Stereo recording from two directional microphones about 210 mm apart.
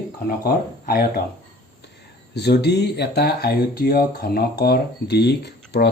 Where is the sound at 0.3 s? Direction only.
45° left (ahead or behind).